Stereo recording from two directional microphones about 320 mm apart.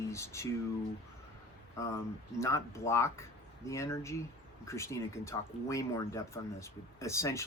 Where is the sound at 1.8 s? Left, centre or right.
Centre.